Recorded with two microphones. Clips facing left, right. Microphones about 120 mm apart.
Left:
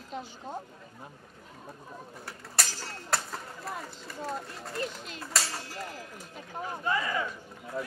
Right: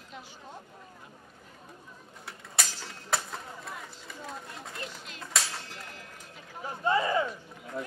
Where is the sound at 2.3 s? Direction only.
Centre (ahead or behind).